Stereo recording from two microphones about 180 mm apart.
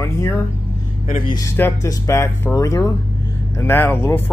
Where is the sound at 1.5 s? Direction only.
15° left (ahead or behind).